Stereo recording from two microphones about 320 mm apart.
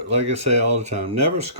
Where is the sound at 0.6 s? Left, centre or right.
Right.